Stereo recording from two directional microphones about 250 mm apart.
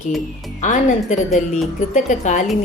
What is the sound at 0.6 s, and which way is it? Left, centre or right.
A woman's voice, left.